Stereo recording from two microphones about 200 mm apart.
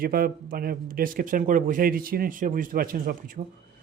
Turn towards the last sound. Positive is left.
turn(degrees=-45)  # may be behind; listen again after turning